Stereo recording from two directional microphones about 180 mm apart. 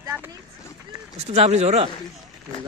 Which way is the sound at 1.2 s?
35° right (ahead or behind).